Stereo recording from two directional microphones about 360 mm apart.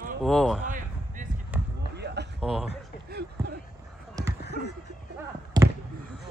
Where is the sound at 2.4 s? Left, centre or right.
Centre.